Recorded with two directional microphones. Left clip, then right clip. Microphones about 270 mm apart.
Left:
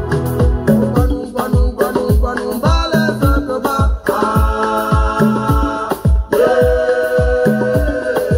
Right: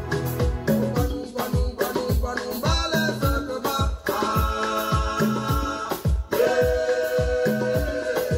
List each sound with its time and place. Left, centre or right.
0.1 s music: left
2.6 s music: left